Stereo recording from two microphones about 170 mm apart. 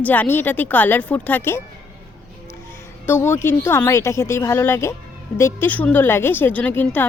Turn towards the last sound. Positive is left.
turn(degrees=10)  # may be behind; listen again after turning